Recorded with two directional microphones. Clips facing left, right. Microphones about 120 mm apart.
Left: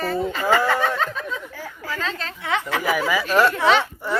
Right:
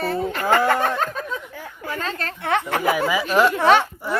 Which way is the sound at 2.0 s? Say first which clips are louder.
Right 3 dB; 55° right (ahead or behind).